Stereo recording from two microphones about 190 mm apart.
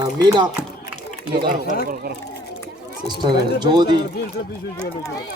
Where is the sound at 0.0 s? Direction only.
20° right (ahead or behind).